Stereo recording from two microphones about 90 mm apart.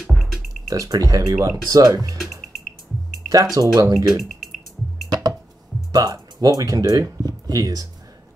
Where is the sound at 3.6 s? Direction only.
45° right (ahead or behind).